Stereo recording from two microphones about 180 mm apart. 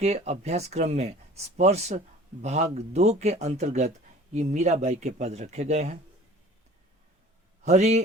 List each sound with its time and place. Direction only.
0.0 s speech: 40° right (ahead or behind)
7.6 s a man's voice: 35° right (ahead or behind)